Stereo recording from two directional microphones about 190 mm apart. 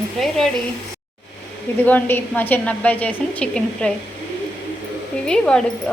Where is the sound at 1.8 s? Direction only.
10° left (ahead or behind).